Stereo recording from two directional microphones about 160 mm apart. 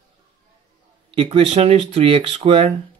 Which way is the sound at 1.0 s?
35° right (ahead or behind).